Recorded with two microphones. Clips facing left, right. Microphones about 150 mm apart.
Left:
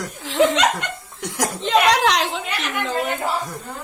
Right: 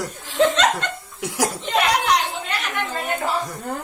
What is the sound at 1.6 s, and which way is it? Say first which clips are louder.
Speech: left 6 dB; 90° left.